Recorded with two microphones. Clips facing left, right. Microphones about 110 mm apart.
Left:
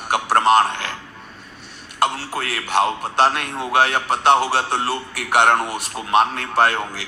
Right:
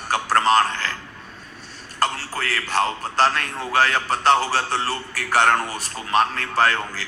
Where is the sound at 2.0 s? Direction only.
15° left (ahead or behind).